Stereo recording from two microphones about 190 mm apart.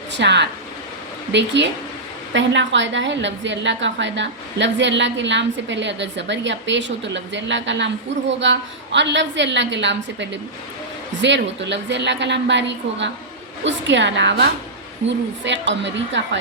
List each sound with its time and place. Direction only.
0.1 s a woman's voice: 65° right (ahead or behind)